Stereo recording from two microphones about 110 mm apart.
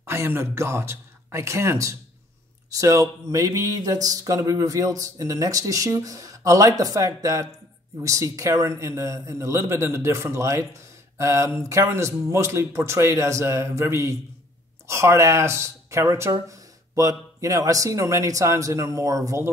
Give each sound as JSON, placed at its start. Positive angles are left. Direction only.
{"t": 0.0, "sound": "a man's voice", "side_deg": -25}